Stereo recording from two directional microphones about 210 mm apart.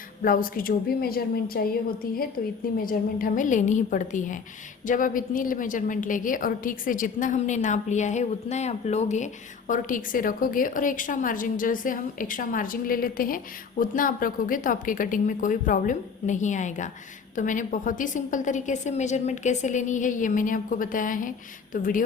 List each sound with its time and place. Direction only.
0.2 s a woman's voice: 40° left (ahead or behind)
2.7 s a woman's voice: 40° left (ahead or behind)